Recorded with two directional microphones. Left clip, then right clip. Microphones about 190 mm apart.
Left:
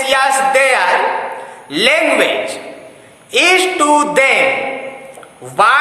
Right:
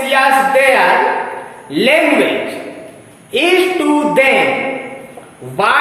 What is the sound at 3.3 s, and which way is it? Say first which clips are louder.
Speech: left 2 dB; 20° left (ahead or behind).